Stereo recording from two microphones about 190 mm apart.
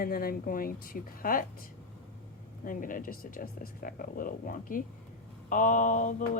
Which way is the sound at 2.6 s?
45° left (ahead or behind).